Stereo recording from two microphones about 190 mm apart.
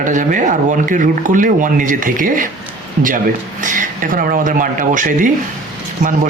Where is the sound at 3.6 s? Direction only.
45° right (ahead or behind).